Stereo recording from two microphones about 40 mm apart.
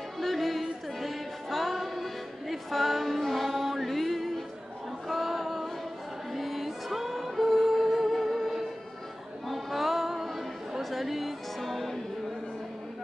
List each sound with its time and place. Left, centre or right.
0.2 s music: centre
5.0 s a sound: centre
6.3 s music: centre